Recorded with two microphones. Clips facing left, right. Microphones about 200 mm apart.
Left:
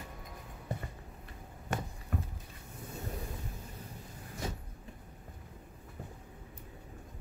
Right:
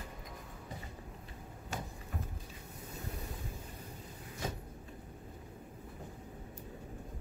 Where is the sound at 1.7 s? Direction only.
60° left (ahead or behind).